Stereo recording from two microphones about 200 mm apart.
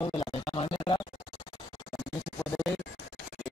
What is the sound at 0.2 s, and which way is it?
Scratch, 25° left (ahead or behind).